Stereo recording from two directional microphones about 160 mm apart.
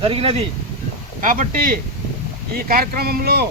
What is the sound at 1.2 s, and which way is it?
Speech, 55° right (ahead or behind).